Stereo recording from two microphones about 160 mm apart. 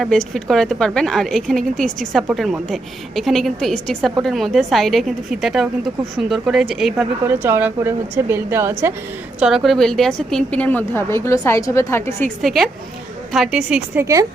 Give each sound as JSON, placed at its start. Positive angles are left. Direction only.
{"t": 0.0, "sound": "a woman's voice", "side_deg": 5}
{"t": 7.4, "sound": "a woman's voice", "side_deg": -15}
{"t": 9.4, "sound": "a woman's voice", "side_deg": -5}
{"t": 12.4, "sound": "a woman's voice", "side_deg": 0}